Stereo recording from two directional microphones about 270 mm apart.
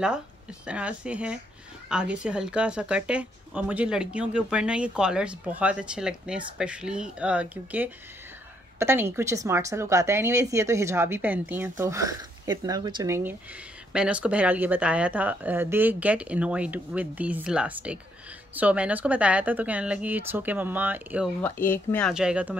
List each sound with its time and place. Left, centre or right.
0.7 s a woman's voice: centre
21.4 s a woman's voice: centre